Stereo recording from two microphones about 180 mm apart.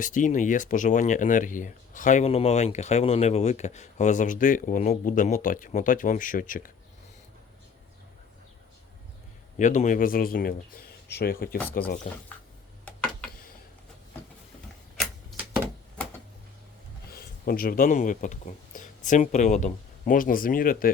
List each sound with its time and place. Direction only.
0.0 s speech: 45° left (ahead or behind)
9.6 s speech: 45° left (ahead or behind)
17.1 s speech: 55° left (ahead or behind)